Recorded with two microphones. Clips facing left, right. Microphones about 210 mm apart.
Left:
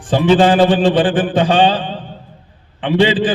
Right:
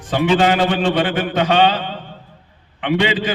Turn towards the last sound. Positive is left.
turn(degrees=30)  # may be behind; listen again after turning